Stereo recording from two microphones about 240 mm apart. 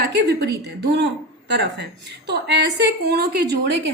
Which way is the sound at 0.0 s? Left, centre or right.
Right.